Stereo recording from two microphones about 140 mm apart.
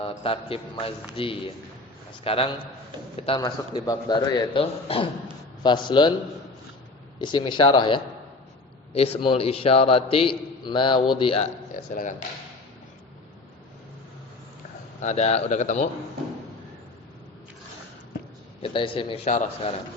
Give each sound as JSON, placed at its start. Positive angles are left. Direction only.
{"t": 0.0, "sound": "a man's voice", "side_deg": 40}
{"t": 3.8, "sound": "a man's voice", "side_deg": 30}
{"t": 4.6, "sound": "a man's voice", "side_deg": 45}
{"t": 7.2, "sound": "a man's voice", "side_deg": 35}
{"t": 11.7, "sound": "a man's voice", "side_deg": 70}
{"t": 15.0, "sound": "speech", "side_deg": 50}
{"t": 18.6, "sound": "a man's voice", "side_deg": 35}
{"t": 19.2, "sound": "speech", "side_deg": 60}